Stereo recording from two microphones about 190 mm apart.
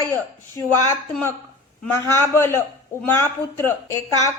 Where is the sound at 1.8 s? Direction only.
10° left (ahead or behind).